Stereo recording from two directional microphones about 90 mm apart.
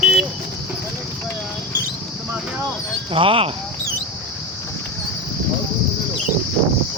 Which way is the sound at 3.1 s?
90° right.